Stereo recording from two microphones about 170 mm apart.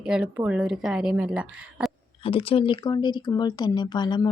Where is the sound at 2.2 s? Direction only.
35° left (ahead or behind).